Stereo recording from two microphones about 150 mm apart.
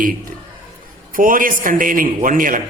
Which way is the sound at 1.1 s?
65° right (ahead or behind).